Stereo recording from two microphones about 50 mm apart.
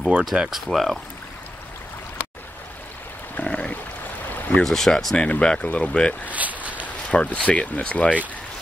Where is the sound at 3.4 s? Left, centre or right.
Centre.